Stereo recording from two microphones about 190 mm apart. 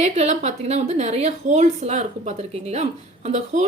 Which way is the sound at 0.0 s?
35° right (ahead or behind).